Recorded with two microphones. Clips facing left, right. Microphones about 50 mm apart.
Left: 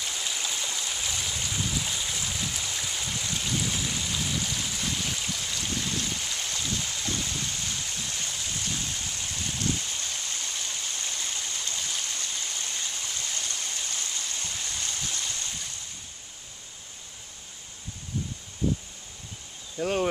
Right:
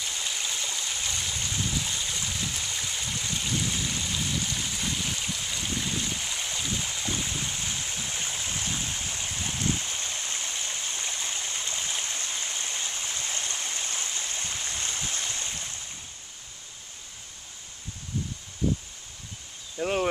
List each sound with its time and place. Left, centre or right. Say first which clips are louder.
0.0 s stream: even; centre; by 15.7 s right
19.8 s speech: even; centre